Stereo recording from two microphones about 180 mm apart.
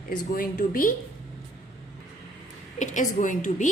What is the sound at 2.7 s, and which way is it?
Speech, 45° left (ahead or behind).